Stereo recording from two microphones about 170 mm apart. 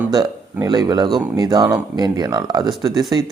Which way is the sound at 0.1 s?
25° right (ahead or behind).